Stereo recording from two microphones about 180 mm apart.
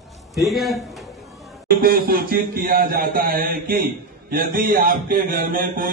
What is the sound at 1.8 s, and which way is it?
Speech, 55° right (ahead or behind).